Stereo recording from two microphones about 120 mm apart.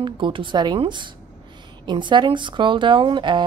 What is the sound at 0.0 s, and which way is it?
A woman's voice, 45° right (ahead or behind).